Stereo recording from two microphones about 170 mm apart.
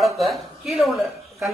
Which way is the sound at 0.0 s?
Centre (ahead or behind).